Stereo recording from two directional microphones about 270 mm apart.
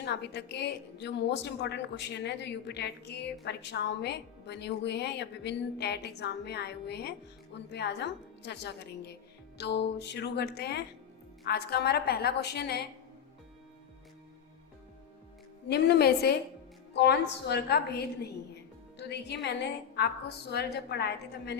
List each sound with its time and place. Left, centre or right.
0.0 s a woman's voice: left
15.7 s a woman's voice: left